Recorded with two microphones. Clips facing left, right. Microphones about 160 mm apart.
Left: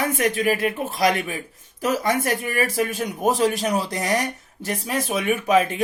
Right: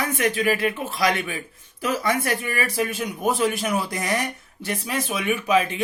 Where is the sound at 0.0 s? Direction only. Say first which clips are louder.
Left 1 dB; 45° left (ahead or behind).